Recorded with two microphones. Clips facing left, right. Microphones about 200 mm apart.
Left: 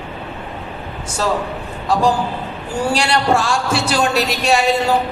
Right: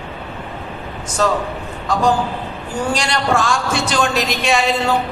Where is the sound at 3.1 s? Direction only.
30° left (ahead or behind).